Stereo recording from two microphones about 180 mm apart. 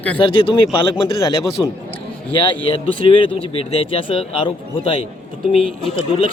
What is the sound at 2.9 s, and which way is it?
Speech, 30° left (ahead or behind).